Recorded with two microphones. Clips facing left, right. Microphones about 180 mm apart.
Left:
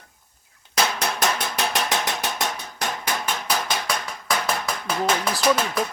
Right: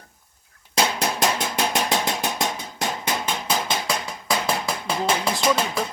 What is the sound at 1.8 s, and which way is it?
Hammer, 15° right (ahead or behind).